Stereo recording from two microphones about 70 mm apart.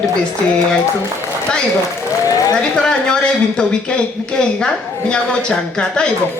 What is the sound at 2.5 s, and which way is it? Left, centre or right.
Speech, centre.